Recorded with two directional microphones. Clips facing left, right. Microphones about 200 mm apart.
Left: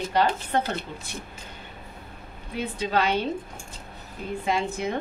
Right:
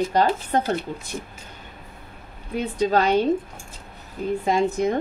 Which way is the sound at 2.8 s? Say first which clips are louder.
Right 5 dB; 45° right (ahead or behind).